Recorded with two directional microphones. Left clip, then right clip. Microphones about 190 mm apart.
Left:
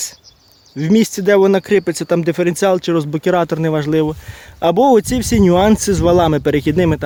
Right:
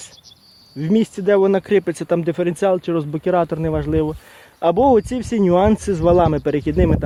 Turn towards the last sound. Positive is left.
turn(degrees=20)  # may be behind; listen again after turning